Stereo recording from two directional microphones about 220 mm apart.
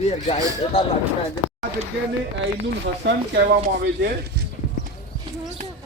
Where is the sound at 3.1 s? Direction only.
50° right (ahead or behind).